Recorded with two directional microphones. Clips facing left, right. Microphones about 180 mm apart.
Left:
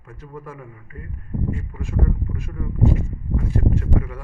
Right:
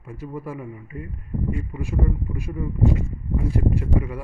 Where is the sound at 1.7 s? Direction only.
10° right (ahead or behind).